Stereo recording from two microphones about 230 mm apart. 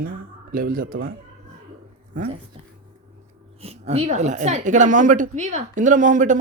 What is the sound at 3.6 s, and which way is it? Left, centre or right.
A woman's voice, right.